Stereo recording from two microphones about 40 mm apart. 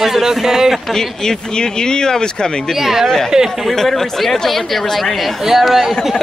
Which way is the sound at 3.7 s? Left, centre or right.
Centre.